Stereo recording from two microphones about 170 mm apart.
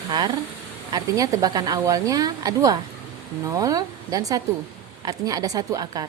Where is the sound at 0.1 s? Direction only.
25° right (ahead or behind).